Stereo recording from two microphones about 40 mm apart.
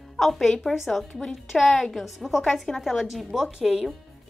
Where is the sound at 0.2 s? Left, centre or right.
Centre.